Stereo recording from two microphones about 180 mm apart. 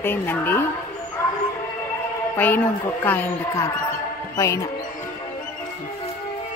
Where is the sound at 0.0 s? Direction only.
10° left (ahead or behind).